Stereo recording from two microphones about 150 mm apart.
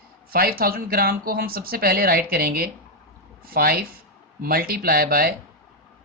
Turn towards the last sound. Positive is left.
turn(degrees=-80)